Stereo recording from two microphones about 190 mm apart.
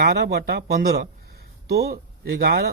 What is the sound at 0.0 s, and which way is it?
Speech, 60° right (ahead or behind).